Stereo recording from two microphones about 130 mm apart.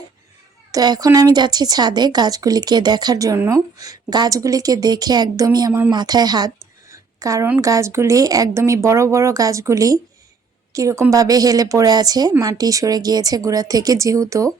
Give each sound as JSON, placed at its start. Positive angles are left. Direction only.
{"t": 0.7, "sound": "a woman's voice", "side_deg": -30}
{"t": 6.9, "sound": "a sound", "side_deg": -25}
{"t": 7.6, "sound": "a woman's voice", "side_deg": -25}